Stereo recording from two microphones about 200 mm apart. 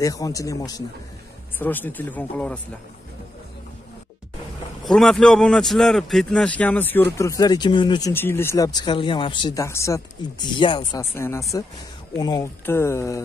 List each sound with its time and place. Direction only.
0.0 s speech: 15° left (ahead or behind)
4.8 s a man's voice: centre (ahead or behind); by 8.1 s 20° left (ahead or behind)
8.1 s speech: 10° left (ahead or behind)